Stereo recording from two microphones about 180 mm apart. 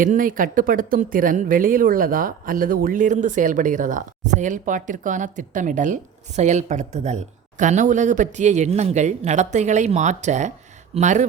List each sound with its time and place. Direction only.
0.0 s speech: 50° right (ahead or behind)